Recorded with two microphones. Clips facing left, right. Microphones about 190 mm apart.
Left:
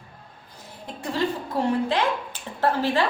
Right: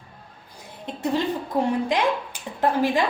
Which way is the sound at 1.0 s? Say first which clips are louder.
Right 2 dB; 20° right (ahead or behind).